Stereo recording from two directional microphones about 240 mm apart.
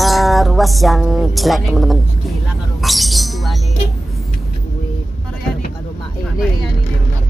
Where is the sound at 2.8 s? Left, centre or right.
Centre.